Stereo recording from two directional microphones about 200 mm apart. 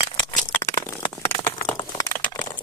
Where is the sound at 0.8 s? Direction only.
10° left (ahead or behind).